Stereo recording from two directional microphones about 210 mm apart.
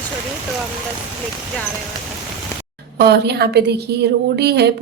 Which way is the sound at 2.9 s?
50° right (ahead or behind).